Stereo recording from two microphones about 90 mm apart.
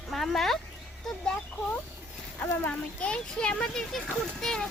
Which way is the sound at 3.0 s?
10° left (ahead or behind).